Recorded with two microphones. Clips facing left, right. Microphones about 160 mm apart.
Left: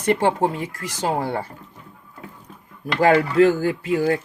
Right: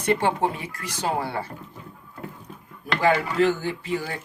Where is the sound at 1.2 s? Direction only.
45° left (ahead or behind).